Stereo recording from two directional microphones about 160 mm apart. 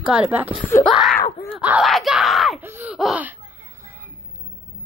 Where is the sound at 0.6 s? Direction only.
10° left (ahead or behind).